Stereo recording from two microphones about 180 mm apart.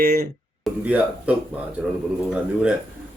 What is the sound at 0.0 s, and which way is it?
Speech, 60° right (ahead or behind).